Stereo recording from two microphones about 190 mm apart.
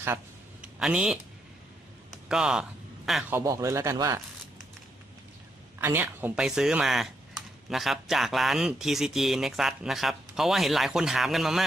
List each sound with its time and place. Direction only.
0.6 s speech: 5° right (ahead or behind)
2.3 s speech: 5° right (ahead or behind)
3.3 s a man's voice: 15° right (ahead or behind)
5.8 s speech: 10° right (ahead or behind)